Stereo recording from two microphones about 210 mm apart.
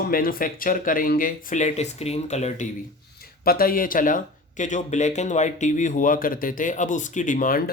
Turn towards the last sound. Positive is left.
turn(degrees=45)  # may be behind; listen again after turning